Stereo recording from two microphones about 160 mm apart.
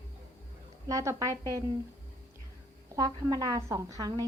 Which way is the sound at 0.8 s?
20° right (ahead or behind).